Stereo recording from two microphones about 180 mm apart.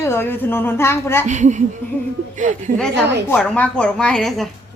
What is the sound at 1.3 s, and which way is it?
A woman's voice, 40° right (ahead or behind).